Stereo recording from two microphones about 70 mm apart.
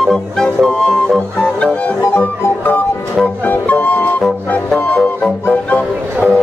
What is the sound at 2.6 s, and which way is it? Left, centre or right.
Music, left.